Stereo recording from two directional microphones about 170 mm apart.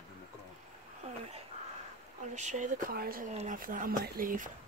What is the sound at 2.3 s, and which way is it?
Speech, 45° right (ahead or behind).